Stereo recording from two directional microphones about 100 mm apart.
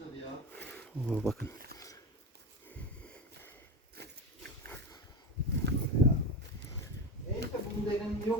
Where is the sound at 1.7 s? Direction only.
35° left (ahead or behind).